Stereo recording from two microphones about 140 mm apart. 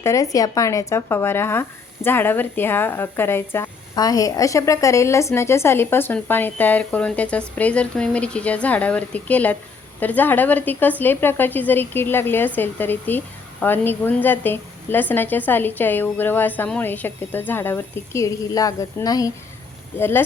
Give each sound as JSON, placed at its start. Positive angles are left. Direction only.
{"t": 0.0, "sound": "speech", "side_deg": 25}
{"t": 3.9, "sound": "a woman's voice", "side_deg": 25}